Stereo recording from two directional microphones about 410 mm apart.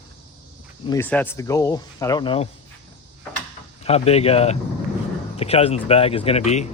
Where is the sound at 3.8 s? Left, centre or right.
Centre.